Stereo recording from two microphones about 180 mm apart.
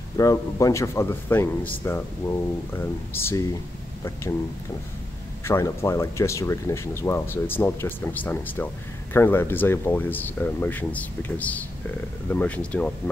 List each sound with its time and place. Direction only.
0.2 s speech: 20° left (ahead or behind)
5.4 s speech: 15° left (ahead or behind)